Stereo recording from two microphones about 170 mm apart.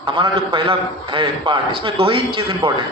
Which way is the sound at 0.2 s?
30° right (ahead or behind).